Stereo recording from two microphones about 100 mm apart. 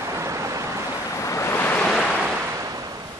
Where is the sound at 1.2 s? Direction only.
30° left (ahead or behind).